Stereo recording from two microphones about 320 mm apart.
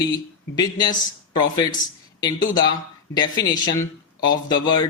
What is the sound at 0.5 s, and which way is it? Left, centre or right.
Speech, centre.